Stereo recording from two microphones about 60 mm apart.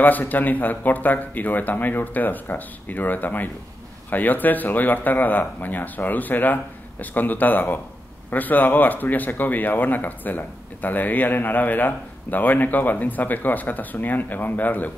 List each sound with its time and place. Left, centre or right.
0.0 s speech: left